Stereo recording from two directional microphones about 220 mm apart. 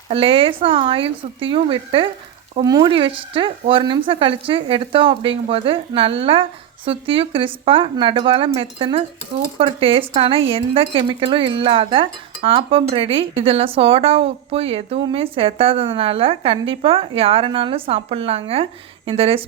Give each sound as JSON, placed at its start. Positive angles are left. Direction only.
{"t": 0.1, "sound": "speech", "side_deg": -25}